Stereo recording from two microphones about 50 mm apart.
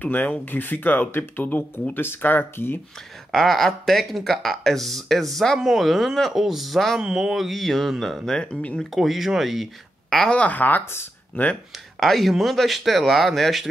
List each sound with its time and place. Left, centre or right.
0.0 s speech: left
3.3 s speech: centre
8.4 s speech: left
8.9 s speech: centre
10.0 s a sound: centre
10.3 s speech: left
12.0 s speech: centre